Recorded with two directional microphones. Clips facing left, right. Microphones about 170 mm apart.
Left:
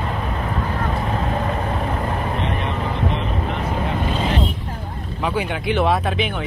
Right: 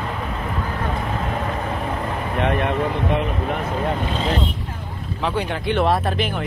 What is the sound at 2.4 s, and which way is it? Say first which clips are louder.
Speech: right 4 dB; 55° right (ahead or behind).